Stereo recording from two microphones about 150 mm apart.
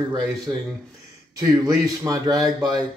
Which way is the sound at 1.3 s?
25° right (ahead or behind).